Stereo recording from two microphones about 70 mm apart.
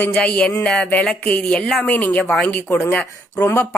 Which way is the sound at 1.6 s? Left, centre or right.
Centre.